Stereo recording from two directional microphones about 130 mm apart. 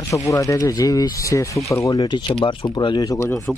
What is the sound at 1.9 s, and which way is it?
Speech, 35° left (ahead or behind).